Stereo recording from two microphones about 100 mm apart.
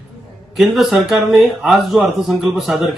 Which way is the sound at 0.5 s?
Centre (ahead or behind).